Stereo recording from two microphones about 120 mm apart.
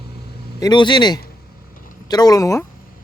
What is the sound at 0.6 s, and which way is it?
Speech, 35° left (ahead or behind).